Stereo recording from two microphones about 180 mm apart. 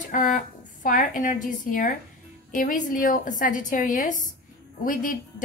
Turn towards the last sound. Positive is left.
turn(degrees=50)  # may be behind; listen again after turning